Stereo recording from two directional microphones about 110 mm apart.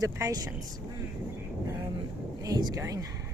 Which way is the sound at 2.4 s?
35° right (ahead or behind).